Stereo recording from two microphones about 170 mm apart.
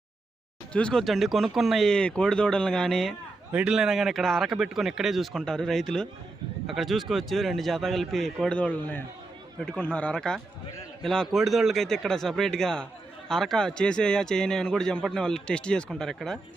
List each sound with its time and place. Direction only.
0.7 s speech: 5° left (ahead or behind)